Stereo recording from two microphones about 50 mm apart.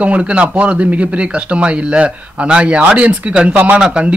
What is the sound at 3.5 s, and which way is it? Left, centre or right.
Speech, right.